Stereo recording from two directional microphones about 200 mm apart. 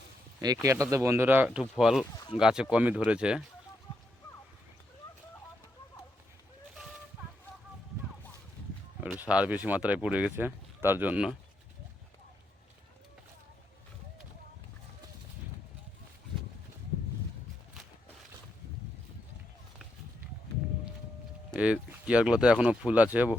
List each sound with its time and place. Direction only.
0.4 s speech: 15° right (ahead or behind)
2.1 s speech: 20° left (ahead or behind)
2.4 s speech: 5° right (ahead or behind)
6.7 s a sound: 5° right (ahead or behind)
9.0 s livestock: 5° right (ahead or behind)
9.3 s speech: 5° right (ahead or behind)
21.5 s speech: 5° right (ahead or behind)